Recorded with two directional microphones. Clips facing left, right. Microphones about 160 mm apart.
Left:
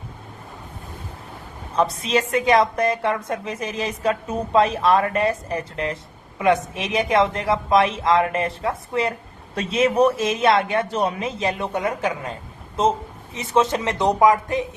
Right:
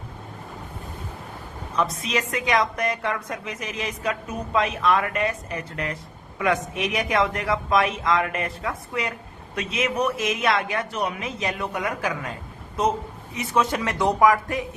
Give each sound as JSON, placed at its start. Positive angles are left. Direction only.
{"t": 1.7, "sound": "a woman's voice", "side_deg": 30}
{"t": 13.3, "sound": "a man's voice", "side_deg": 25}